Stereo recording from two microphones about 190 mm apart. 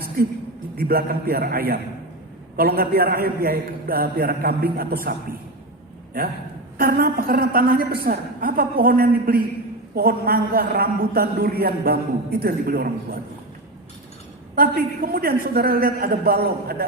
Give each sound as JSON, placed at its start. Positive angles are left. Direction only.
{"t": 0.2, "sound": "a man's voice", "side_deg": -55}
{"t": 6.7, "sound": "a man's voice", "side_deg": -50}
{"t": 14.5, "sound": "a man's voice", "side_deg": -50}